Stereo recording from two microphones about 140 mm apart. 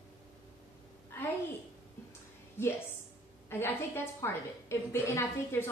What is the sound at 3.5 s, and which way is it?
A woman's voice, 15° left (ahead or behind).